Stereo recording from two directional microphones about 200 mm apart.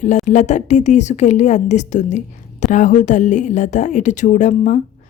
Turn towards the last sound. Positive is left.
turn(degrees=40)  # may be behind; listen again after turning